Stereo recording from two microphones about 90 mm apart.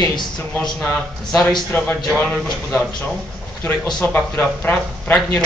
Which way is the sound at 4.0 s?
15° left (ahead or behind).